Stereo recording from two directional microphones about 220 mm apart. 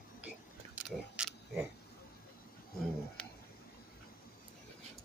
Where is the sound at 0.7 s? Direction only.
5° right (ahead or behind).